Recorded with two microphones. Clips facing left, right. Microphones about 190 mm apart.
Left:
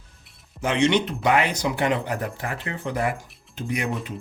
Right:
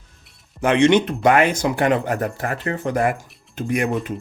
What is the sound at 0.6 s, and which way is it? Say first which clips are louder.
Speech: right 6 dB; 55° right (ahead or behind).